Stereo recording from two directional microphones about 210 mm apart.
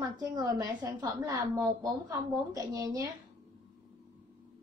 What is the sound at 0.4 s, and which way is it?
A woman's voice, 15° right (ahead or behind).